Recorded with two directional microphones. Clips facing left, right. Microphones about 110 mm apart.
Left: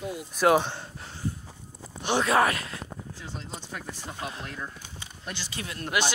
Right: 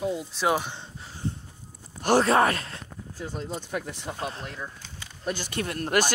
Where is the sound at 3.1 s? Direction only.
45° right (ahead or behind).